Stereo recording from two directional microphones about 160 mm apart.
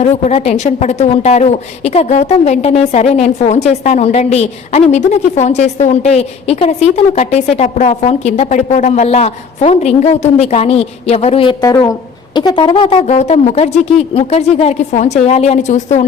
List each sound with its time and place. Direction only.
0.0 s a woman's voice: 45° left (ahead or behind)
11.6 s speech: 20° left (ahead or behind); by 16.0 s 45° left (ahead or behind)